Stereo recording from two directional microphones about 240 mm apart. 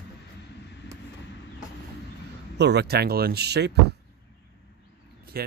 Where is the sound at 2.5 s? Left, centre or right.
Right.